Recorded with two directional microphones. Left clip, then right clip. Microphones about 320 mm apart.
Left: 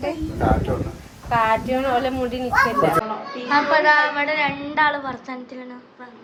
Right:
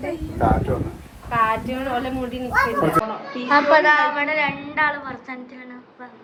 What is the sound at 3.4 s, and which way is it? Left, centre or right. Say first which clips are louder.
Speech: right 2 dB; centre.